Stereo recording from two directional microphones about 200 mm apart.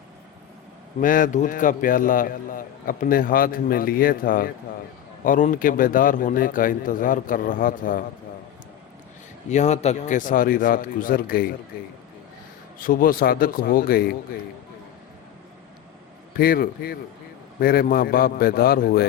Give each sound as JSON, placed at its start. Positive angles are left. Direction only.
{"t": 1.0, "sound": "a man's voice", "side_deg": 40}
{"t": 9.5, "sound": "a man's voice", "side_deg": 35}
{"t": 16.4, "sound": "a man's voice", "side_deg": 45}